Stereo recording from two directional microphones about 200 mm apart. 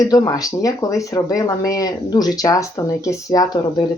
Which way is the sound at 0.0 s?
20° left (ahead or behind).